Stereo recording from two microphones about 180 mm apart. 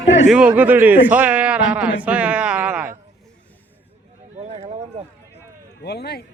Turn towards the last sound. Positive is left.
turn(degrees=65)  # may be behind; listen again after turning